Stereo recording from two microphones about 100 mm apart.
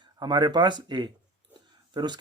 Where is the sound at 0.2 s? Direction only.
45° right (ahead or behind).